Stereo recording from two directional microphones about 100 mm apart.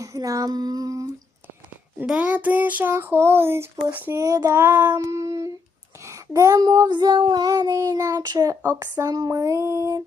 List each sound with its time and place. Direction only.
0.0 s child singing: 35° right (ahead or behind)
2.0 s child singing: 10° right (ahead or behind)
4.2 s child singing: 35° right (ahead or behind)
4.6 s child singing: 20° right (ahead or behind)
4.9 s child singing: 30° right (ahead or behind)